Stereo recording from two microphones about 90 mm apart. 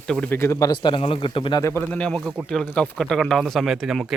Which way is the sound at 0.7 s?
60° left (ahead or behind).